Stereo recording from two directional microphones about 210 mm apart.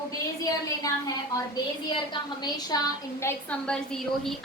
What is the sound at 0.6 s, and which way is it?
A woman's voice, 15° left (ahead or behind).